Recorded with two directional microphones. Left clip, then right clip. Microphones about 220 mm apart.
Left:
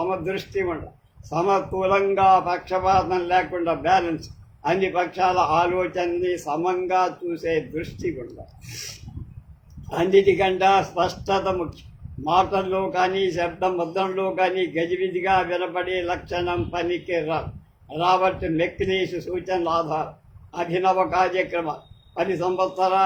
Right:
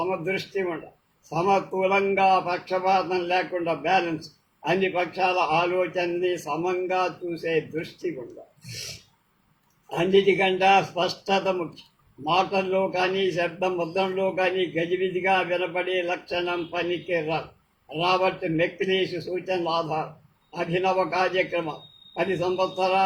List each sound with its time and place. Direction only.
0.3 s a man's voice: 15° left (ahead or behind)
10.1 s a man's voice: 15° left (ahead or behind)